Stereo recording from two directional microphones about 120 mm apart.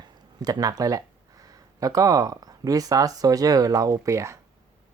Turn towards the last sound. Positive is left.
turn(degrees=-25)  # may be behind; listen again after turning